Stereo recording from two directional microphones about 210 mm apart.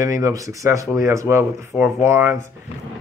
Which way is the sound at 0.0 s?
15° right (ahead or behind).